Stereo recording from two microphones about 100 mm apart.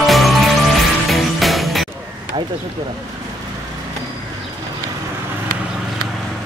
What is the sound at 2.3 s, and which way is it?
Speech, 55° right (ahead or behind).